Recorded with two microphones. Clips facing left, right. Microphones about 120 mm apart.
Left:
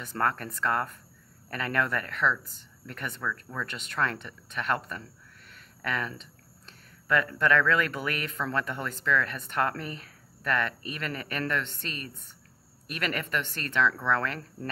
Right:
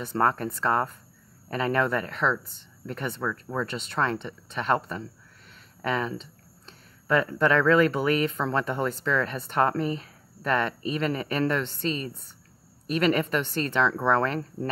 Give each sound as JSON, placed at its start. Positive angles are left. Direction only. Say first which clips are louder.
{"t": 0.0, "sound": "speech", "louder": "right 5 dB", "side_deg": -30}